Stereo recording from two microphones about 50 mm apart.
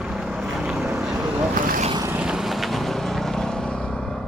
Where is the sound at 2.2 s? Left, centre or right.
Centre.